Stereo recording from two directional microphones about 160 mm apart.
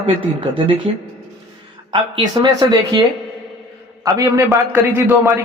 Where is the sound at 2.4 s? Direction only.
30° right (ahead or behind).